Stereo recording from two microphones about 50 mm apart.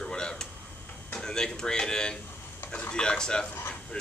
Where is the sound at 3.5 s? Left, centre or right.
Left.